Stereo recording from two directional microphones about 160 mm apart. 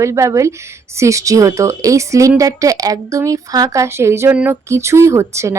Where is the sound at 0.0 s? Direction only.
20° right (ahead or behind).